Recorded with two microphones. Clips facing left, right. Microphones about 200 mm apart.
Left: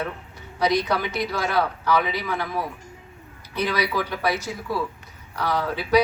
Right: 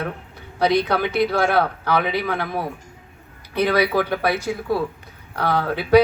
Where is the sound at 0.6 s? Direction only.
60° right (ahead or behind).